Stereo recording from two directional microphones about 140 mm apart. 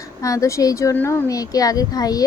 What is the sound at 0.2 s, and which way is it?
A woman's voice, 20° left (ahead or behind).